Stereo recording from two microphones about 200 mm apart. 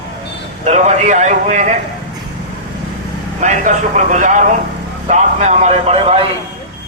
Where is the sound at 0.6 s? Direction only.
35° right (ahead or behind).